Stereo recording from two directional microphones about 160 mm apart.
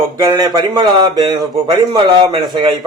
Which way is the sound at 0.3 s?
25° right (ahead or behind).